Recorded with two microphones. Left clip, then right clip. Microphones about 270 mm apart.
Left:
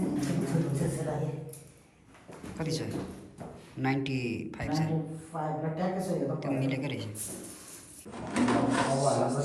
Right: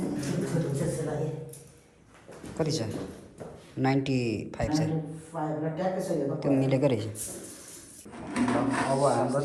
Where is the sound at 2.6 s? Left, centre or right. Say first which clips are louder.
Right 4 dB; centre.